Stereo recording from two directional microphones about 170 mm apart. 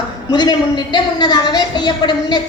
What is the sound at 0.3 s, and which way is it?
A woman's voice, 25° left (ahead or behind).